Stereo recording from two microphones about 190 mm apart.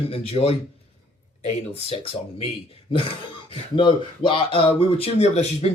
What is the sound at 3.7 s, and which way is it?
Speech, 25° left (ahead or behind).